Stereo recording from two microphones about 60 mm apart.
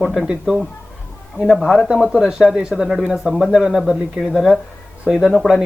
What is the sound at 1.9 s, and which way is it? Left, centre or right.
Speech, centre.